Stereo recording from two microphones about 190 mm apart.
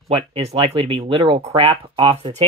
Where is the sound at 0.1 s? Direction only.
30° right (ahead or behind).